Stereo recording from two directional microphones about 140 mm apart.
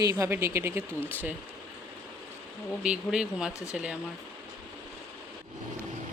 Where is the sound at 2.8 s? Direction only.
5° right (ahead or behind).